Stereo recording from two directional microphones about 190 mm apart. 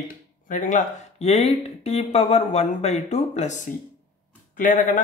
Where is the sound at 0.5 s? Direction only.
40° left (ahead or behind).